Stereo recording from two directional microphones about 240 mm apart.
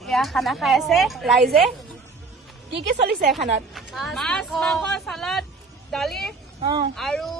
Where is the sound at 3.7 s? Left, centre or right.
Centre.